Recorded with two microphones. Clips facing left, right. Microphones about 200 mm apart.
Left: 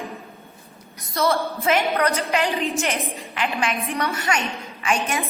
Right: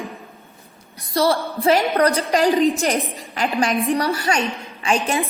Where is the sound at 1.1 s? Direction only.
35° right (ahead or behind).